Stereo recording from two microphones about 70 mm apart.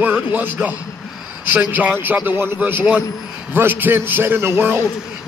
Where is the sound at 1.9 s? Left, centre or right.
Right.